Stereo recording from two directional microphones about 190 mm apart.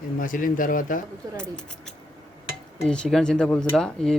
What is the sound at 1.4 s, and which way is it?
Speech, 5° left (ahead or behind).